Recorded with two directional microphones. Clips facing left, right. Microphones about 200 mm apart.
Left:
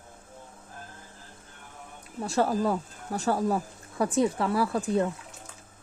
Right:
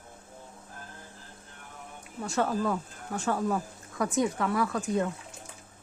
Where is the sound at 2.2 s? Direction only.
35° left (ahead or behind).